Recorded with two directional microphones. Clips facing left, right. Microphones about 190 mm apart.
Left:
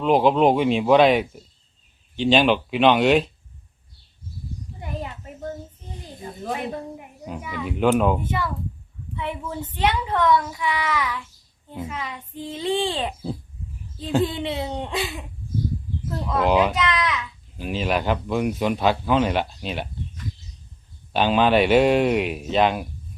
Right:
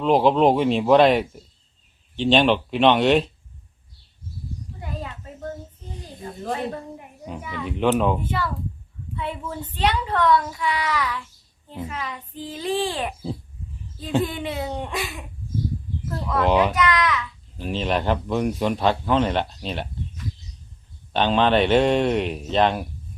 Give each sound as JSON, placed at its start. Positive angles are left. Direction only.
{"t": 0.0, "sound": "speech", "side_deg": 0}
{"t": 4.8, "sound": "a sound", "side_deg": 20}
{"t": 6.5, "sound": "a woman's voice", "side_deg": 10}
{"t": 14.2, "sound": "a child's voice", "side_deg": 25}
{"t": 16.0, "sound": "a child's voice", "side_deg": 20}
{"t": 16.4, "sound": "speech", "side_deg": 0}
{"t": 16.7, "sound": "a child's voice", "side_deg": 25}
{"t": 17.6, "sound": "speech", "side_deg": 5}
{"t": 21.1, "sound": "speech", "side_deg": 5}